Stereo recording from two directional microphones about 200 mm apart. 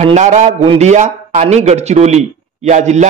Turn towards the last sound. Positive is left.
turn(degrees=-35)  # may be behind; listen again after turning